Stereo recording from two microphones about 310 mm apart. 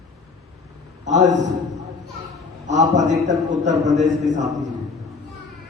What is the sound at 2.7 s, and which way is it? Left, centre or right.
A man's voice, right.